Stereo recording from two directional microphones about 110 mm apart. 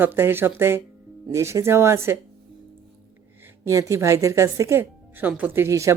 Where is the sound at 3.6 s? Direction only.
25° right (ahead or behind).